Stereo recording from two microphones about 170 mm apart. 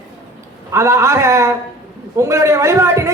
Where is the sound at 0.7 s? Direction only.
15° right (ahead or behind).